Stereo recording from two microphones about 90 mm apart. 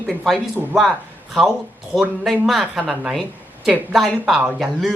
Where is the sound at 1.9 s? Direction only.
Centre (ahead or behind).